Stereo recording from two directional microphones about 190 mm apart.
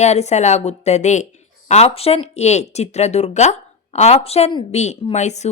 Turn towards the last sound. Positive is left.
turn(degrees=35)  # may be behind; listen again after turning